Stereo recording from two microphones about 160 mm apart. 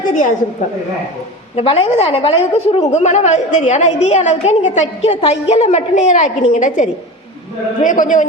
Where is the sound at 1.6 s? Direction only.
40° left (ahead or behind).